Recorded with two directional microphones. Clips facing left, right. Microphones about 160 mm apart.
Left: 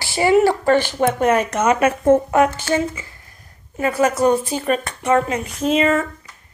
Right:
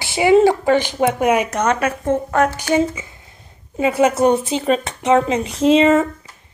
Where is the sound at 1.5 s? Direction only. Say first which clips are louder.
Left 1 dB; 5° left (ahead or behind).